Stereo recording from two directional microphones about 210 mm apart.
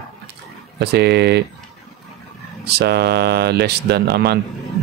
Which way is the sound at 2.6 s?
50° right (ahead or behind).